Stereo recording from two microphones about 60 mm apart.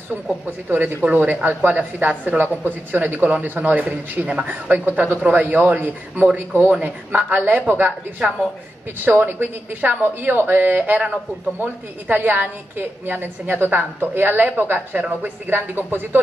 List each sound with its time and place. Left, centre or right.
0.7 s a woman's voice: right
9.0 s a woman's voice: right